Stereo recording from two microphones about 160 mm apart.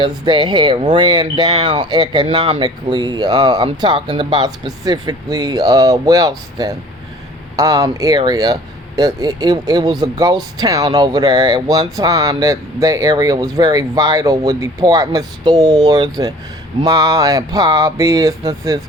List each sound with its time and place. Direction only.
0.0 s speech: 30° right (ahead or behind)